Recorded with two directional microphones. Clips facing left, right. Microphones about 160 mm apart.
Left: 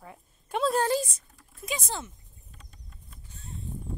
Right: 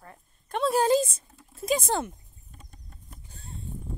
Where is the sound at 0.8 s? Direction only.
25° right (ahead or behind).